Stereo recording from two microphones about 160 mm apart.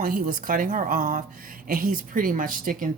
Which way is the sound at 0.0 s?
60° right (ahead or behind).